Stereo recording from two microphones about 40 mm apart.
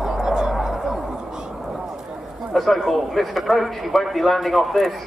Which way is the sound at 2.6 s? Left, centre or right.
Centre.